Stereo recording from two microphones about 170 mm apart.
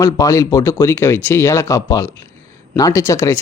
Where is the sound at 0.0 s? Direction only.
20° left (ahead or behind).